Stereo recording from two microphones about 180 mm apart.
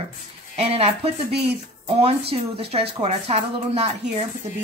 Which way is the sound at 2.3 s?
35° right (ahead or behind).